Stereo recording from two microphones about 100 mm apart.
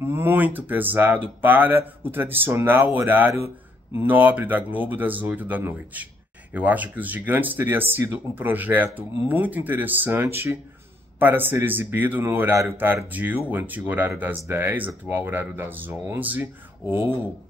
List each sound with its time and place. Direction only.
0.0 s speech: 25° right (ahead or behind)